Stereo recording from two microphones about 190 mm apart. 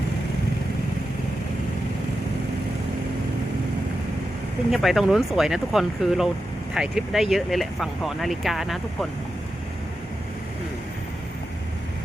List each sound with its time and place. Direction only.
4.7 s speech: centre (ahead or behind)